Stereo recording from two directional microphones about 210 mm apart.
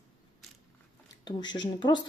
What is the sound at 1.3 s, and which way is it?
Speech, 20° left (ahead or behind).